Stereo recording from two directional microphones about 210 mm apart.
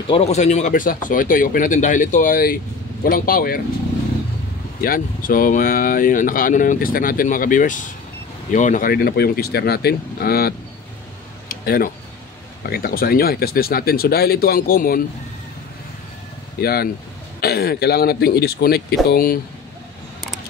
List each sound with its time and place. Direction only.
0.1 s speech: 30° left (ahead or behind)
4.8 s speech: 40° left (ahead or behind)
11.4 s a sound: 45° left (ahead or behind)
12.6 s speech: 45° left (ahead or behind)
16.6 s speech: 45° left (ahead or behind)